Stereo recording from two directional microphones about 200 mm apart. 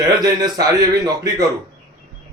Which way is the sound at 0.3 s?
20° right (ahead or behind).